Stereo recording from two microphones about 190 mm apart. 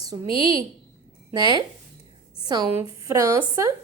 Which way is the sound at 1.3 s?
20° right (ahead or behind).